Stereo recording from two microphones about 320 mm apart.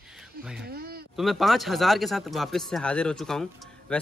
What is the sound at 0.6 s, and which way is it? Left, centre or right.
Speech, right.